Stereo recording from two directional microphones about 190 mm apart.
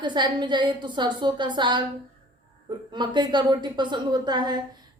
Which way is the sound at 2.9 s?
25° right (ahead or behind).